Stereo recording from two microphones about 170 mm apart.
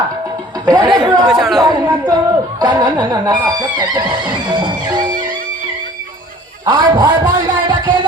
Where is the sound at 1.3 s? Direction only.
Centre (ahead or behind).